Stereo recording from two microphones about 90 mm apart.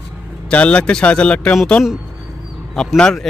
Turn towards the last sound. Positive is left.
turn(degrees=5)  # may be behind; listen again after turning